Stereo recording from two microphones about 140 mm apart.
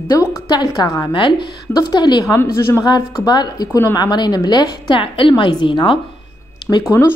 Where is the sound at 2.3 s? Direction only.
20° left (ahead or behind); by 5.9 s 35° left (ahead or behind).